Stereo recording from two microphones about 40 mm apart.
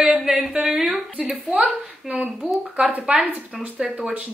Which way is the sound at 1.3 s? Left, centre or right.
Right.